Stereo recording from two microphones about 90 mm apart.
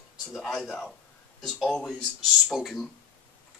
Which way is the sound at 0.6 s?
15° left (ahead or behind).